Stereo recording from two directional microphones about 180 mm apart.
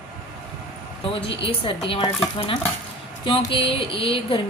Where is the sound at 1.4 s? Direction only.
30° left (ahead or behind).